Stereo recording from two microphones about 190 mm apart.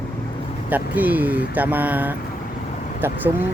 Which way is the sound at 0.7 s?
10° right (ahead or behind).